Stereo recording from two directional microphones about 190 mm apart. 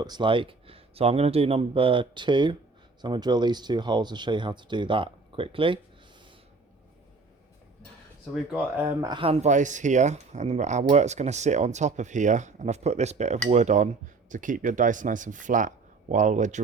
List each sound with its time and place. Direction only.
0.0 s speech: 25° right (ahead or behind)
8.4 s speech: 10° right (ahead or behind)
9.0 s speech: 25° right (ahead or behind)